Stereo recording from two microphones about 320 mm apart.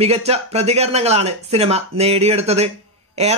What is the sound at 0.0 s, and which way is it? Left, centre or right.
Speech, centre.